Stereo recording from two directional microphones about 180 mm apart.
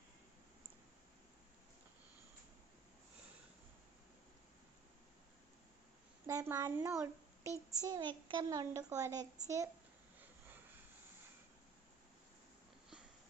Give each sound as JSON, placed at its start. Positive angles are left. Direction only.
{"t": 6.2, "sound": "a child's voice", "side_deg": -15}